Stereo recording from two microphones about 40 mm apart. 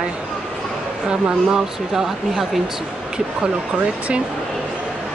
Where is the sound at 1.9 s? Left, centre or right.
Centre.